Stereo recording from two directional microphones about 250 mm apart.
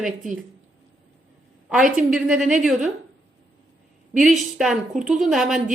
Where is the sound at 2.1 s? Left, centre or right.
Centre.